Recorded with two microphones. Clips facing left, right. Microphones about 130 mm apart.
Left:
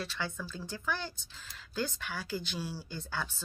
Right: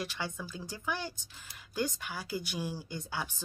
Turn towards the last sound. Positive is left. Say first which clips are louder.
# even
turn(degrees=-15)  # may be behind; listen again after turning